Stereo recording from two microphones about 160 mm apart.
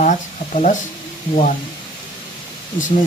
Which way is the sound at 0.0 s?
50° left (ahead or behind).